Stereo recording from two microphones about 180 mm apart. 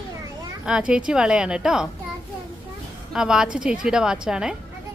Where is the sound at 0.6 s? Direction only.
5° right (ahead or behind).